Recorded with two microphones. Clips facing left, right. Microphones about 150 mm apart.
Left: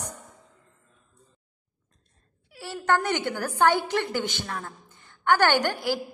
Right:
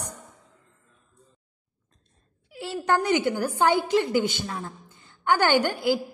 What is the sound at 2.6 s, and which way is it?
A woman's voice, 15° right (ahead or behind).